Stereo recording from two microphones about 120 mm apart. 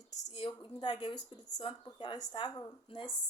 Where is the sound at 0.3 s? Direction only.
40° left (ahead or behind).